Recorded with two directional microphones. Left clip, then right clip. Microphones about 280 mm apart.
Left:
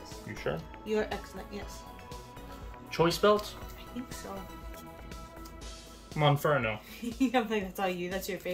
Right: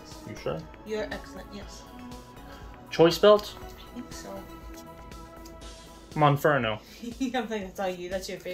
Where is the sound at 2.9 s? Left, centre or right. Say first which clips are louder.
Right 7 dB; centre.